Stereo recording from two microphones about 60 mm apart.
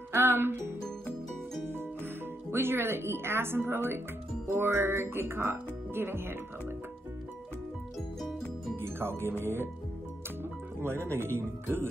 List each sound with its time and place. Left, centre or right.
0.1 s music: right
2.5 s speech: right
8.7 s speech: right
10.8 s speech: right